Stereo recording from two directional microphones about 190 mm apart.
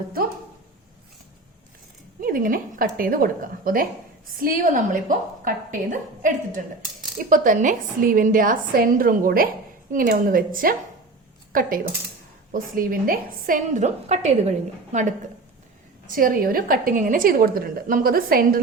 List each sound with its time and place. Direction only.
2.2 s a woman's voice: 45° right (ahead or behind)
16.1 s a woman's voice: 50° right (ahead or behind)